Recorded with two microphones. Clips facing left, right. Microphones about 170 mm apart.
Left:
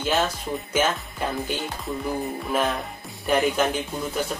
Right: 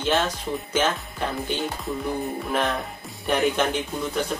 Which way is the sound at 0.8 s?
10° left (ahead or behind).